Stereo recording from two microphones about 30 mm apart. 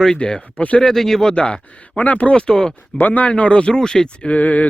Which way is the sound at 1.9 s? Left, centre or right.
Left.